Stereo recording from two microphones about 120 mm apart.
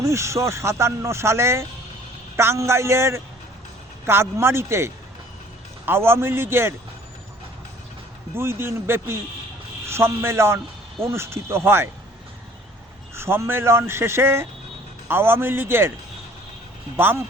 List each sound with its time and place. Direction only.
0.0 s speech: 25° right (ahead or behind)
8.4 s speech: 20° right (ahead or behind)
13.1 s speech: 20° right (ahead or behind)
17.0 s speech: 20° right (ahead or behind)